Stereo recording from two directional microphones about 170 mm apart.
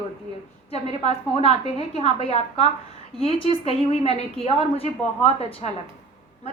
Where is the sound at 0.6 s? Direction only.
35° left (ahead or behind).